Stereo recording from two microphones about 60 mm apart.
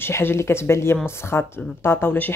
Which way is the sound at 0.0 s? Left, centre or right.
Left.